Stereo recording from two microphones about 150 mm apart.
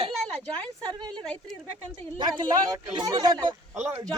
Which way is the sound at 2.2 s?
30° right (ahead or behind).